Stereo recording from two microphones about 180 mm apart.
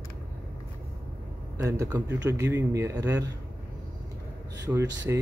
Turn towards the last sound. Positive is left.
turn(degrees=-15)  # may be behind; listen again after turning